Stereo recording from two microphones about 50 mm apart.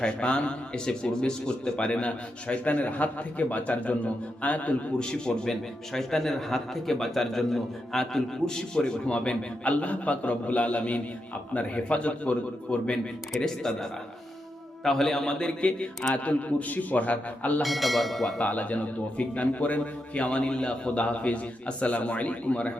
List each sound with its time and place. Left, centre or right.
0.0 s a man's voice: centre
5.0 s a man's voice: centre
13.4 s a man's voice: centre
14.8 s a man's voice: centre; by 17.6 s left
17.6 s speech: centre
18.4 s a man's voice: left